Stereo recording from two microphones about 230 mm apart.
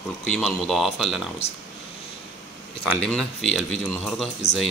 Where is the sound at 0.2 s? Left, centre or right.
Centre.